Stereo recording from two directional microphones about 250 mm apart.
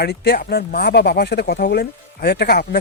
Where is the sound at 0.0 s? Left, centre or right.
Left.